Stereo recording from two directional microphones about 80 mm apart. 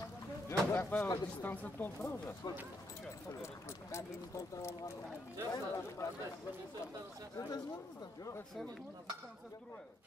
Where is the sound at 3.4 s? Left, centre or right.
Left.